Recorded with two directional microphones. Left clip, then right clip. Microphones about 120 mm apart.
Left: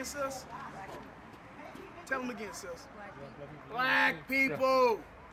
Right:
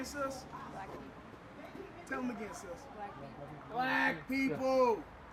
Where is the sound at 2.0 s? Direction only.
25° left (ahead or behind).